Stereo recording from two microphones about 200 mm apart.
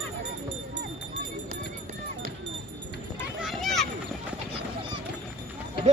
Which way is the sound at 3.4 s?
Centre (ahead or behind).